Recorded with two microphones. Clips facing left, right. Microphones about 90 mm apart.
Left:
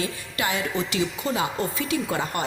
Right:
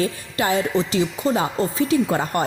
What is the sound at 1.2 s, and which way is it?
A woman's voice, 35° right (ahead or behind).